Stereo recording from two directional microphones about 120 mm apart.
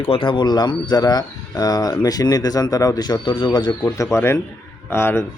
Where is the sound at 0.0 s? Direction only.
50° left (ahead or behind).